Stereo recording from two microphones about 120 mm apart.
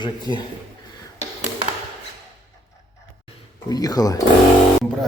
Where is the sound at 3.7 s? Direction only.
30° left (ahead or behind).